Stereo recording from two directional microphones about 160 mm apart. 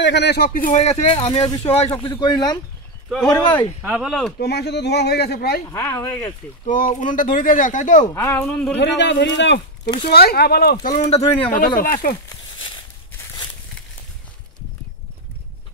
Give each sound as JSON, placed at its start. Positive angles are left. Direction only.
{"t": 0.0, "sound": "a man's voice", "side_deg": 90}
{"t": 3.8, "sound": "speech", "side_deg": -5}
{"t": 4.4, "sound": "speech", "side_deg": 90}
{"t": 5.7, "sound": "speech", "side_deg": 20}
{"t": 6.7, "sound": "a man's voice", "side_deg": 55}
{"t": 8.1, "sound": "speech", "side_deg": 20}
{"t": 8.5, "sound": "speech", "side_deg": 5}
{"t": 8.7, "sound": "speech", "side_deg": 90}
{"t": 10.0, "sound": "speech", "side_deg": 75}
{"t": 11.1, "sound": "speech", "side_deg": 40}
{"t": 11.8, "sound": "a man's voice", "side_deg": 65}